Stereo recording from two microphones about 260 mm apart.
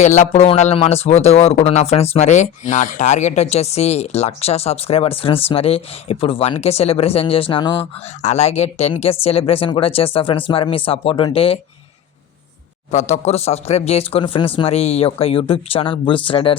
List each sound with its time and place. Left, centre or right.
0.0 s a man's voice: left
12.9 s a man's voice: left